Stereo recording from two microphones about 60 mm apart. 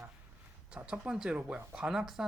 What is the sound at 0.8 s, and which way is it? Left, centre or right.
Speech, centre.